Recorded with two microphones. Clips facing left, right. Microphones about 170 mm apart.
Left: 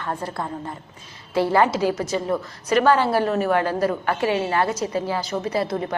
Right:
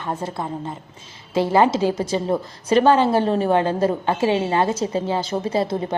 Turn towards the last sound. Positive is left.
turn(degrees=-25)  # may be behind; listen again after turning